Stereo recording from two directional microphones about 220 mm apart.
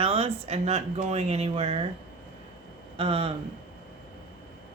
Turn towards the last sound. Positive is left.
turn(degrees=-25)  # may be behind; listen again after turning